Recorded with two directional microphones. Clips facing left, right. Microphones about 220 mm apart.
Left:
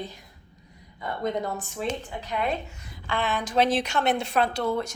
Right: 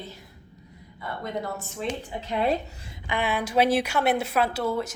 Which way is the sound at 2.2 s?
30° right (ahead or behind).